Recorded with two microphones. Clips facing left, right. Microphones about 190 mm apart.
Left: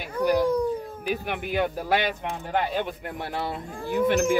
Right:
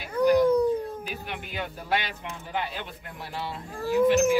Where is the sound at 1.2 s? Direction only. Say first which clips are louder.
Left 8 dB; 55° left (ahead or behind).